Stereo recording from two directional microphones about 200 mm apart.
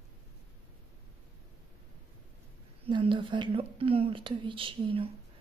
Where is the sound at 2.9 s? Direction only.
25° right (ahead or behind).